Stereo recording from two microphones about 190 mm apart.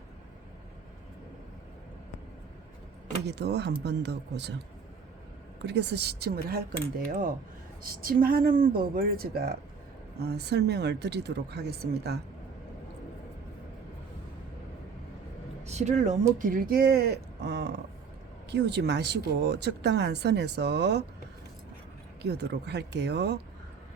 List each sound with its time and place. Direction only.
3.2 s speech: 60° right (ahead or behind)
5.6 s speech: 65° right (ahead or behind)
7.1 s speech: 45° right (ahead or behind)
15.6 s speech: 35° right (ahead or behind)
16.4 s speech: 50° right (ahead or behind)
22.2 s speech: 60° right (ahead or behind)